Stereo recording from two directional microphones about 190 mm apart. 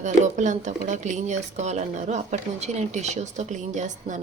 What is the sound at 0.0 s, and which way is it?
Speech, 40° right (ahead or behind).